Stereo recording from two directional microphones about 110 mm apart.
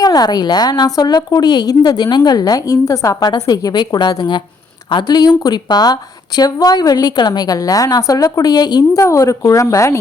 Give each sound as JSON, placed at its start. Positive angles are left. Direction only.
{"t": 0.0, "sound": "a woman's voice", "side_deg": 35}